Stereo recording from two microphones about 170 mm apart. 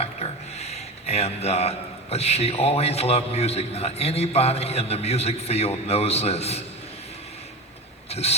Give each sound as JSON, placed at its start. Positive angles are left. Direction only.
{"t": 0.0, "sound": "a man's voice", "side_deg": 40}
{"t": 8.1, "sound": "speech", "side_deg": 35}